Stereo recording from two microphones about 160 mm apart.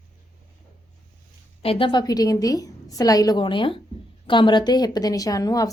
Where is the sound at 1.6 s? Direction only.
35° left (ahead or behind).